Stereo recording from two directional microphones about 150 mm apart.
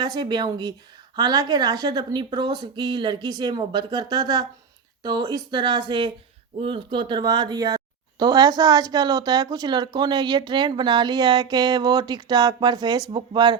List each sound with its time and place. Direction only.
0.0 s a woman's voice: 30° right (ahead or behind)